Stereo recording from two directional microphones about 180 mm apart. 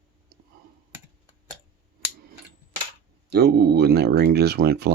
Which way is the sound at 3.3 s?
65° right (ahead or behind).